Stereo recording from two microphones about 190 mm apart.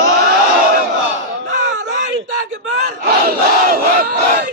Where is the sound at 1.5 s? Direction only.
40° right (ahead or behind).